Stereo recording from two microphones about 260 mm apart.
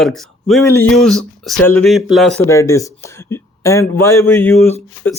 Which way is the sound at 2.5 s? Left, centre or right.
Centre.